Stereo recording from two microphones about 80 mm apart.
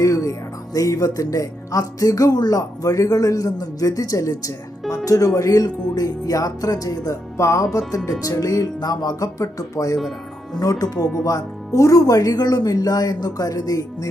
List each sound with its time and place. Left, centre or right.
0.0 s speech: left
10.0 s music: centre
10.6 s speech: left